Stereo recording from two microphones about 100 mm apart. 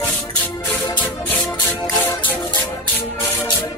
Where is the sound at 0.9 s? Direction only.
15° left (ahead or behind).